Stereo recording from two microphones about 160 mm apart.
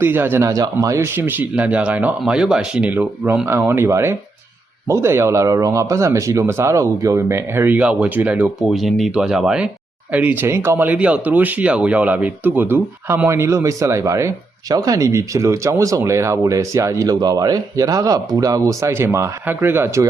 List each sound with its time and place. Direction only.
0.0 s speech: 15° right (ahead or behind)